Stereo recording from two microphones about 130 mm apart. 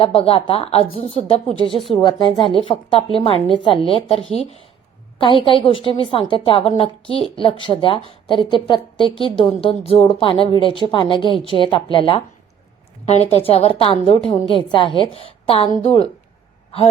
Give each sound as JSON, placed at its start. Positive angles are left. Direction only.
{"t": 0.0, "sound": "a woman's voice", "side_deg": 45}
{"t": 1.5, "sound": "speech", "side_deg": -35}
{"t": 2.0, "sound": "a woman's voice", "side_deg": 35}
{"t": 13.1, "sound": "a woman's voice", "side_deg": 50}